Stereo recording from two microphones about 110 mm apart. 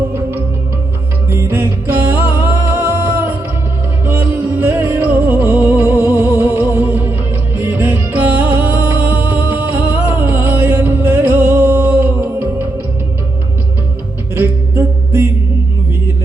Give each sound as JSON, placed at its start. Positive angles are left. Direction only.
{"t": 1.3, "sound": "music", "side_deg": -20}
{"t": 14.3, "sound": "music", "side_deg": -20}